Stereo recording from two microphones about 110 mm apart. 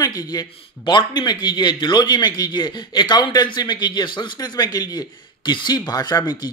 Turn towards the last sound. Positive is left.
turn(degrees=40)  # may be behind; listen again after turning